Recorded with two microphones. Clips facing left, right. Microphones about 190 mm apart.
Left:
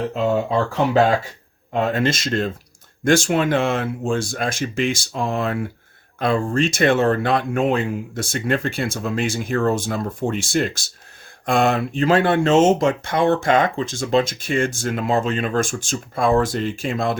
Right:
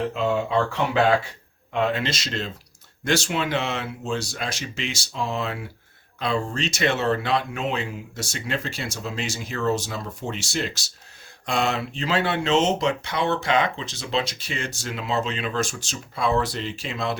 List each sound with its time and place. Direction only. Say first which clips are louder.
1.7 s speech: left 4 dB; 45° left (ahead or behind)